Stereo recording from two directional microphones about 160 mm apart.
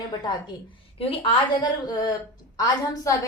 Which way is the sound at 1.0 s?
35° left (ahead or behind).